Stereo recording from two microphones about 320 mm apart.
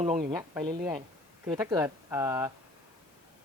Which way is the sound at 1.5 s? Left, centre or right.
Centre.